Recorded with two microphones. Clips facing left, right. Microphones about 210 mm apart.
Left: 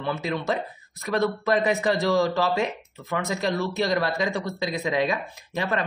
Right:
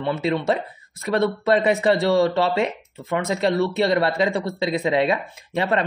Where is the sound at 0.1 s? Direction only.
25° right (ahead or behind).